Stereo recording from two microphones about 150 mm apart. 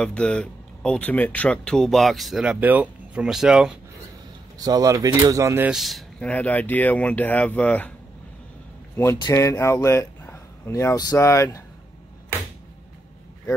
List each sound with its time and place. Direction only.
0.0 s speech: 5° left (ahead or behind)
4.6 s speech: 25° right (ahead or behind)
5.7 s speech: centre (ahead or behind)
9.2 s speech: 20° left (ahead or behind)